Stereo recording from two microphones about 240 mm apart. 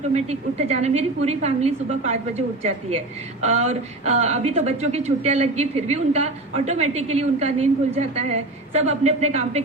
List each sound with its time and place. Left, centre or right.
0.1 s speech: right
3.4 s speech: right